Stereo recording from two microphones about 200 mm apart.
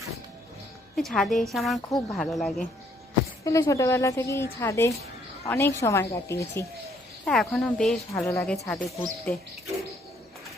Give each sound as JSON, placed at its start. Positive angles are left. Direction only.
{"t": 0.9, "sound": "speech", "side_deg": 5}
{"t": 3.4, "sound": "a woman's voice", "side_deg": 15}
{"t": 7.3, "sound": "speech", "side_deg": 5}
{"t": 8.1, "sound": "a woman's voice", "side_deg": 15}